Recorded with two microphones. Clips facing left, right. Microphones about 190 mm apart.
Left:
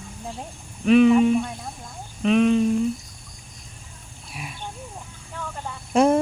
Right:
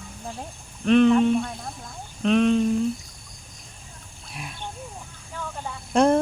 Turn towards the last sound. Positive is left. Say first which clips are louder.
# left 1 dB
turn(degrees=5)  # may be behind; listen again after turning